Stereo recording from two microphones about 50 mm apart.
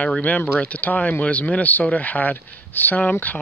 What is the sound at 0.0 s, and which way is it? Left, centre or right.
Speech, left.